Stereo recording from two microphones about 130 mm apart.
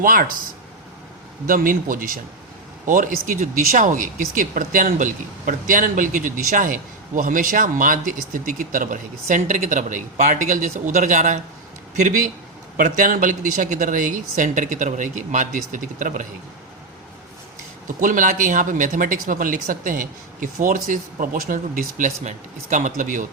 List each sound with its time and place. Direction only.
0.0 s speech: 90° right
1.5 s speech: 90° right; by 12.3 s 75° right (ahead or behind)
12.8 s speech: 85° right
17.8 s speech: 90° right